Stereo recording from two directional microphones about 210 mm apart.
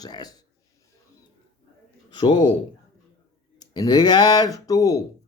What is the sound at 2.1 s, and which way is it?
Speech, 20° left (ahead or behind).